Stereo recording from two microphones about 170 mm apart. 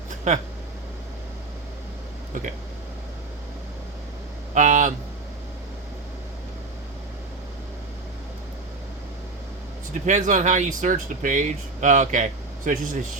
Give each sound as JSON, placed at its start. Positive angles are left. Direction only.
{"t": 0.3, "sound": "speech", "side_deg": -45}
{"t": 4.5, "sound": "a sound", "side_deg": -45}
{"t": 10.1, "sound": "speech", "side_deg": -45}